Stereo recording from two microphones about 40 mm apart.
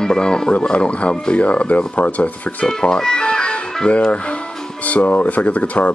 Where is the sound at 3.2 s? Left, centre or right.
Left.